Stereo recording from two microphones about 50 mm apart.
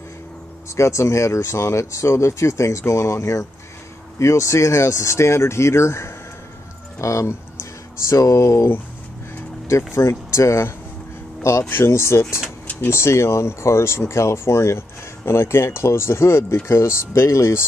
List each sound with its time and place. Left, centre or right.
0.7 s speech: left
7.0 s speech: left
9.9 s speech: left
11.7 s speech: left